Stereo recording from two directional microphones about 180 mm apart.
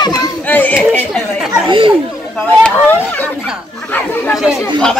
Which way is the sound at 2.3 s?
10° left (ahead or behind).